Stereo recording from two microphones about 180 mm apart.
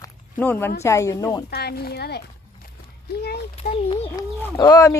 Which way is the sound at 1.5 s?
60° left (ahead or behind).